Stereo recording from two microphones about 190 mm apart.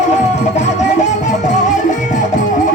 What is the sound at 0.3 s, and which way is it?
Music, 35° left (ahead or behind).